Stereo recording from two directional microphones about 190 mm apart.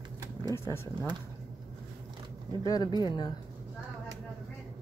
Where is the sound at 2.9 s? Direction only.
20° left (ahead or behind).